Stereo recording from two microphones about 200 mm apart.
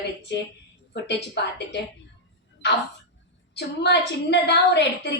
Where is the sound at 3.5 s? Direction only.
55° left (ahead or behind).